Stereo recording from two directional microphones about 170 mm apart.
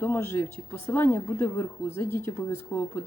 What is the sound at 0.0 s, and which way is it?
Speech, 15° left (ahead or behind).